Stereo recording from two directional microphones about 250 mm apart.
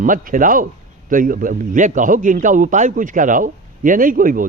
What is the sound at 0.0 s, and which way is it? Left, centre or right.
A man's voice, right.